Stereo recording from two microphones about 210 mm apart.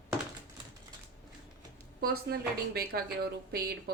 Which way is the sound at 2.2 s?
50° right (ahead or behind).